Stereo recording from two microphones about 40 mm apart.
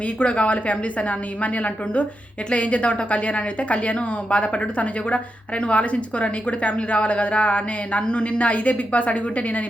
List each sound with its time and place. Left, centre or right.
0.2 s a woman's voice: left